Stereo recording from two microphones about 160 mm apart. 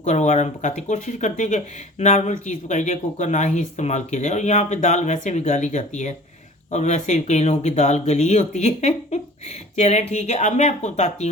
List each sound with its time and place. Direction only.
0.0 s speech: 45° left (ahead or behind)